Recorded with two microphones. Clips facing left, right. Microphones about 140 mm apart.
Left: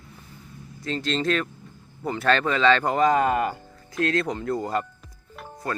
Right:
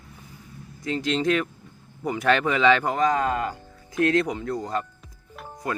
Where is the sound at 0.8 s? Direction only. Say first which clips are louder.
Right 2 dB; 15° right (ahead or behind).